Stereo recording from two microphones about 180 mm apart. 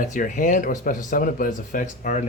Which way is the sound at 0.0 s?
45° left (ahead or behind).